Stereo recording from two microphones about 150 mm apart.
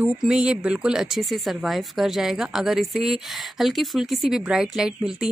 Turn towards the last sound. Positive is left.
turn(degrees=-5)  # may be behind; listen again after turning